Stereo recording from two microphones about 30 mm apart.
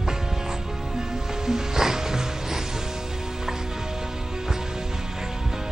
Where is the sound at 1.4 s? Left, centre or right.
Centre.